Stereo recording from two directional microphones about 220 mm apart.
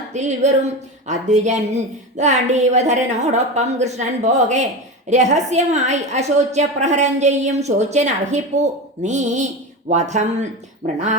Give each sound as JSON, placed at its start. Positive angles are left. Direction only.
{"t": 0.1, "sound": "a woman's voice", "side_deg": -30}